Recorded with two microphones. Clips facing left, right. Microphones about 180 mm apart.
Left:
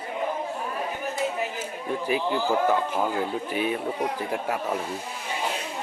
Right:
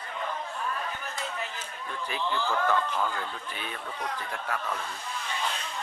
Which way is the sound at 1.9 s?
10° left (ahead or behind).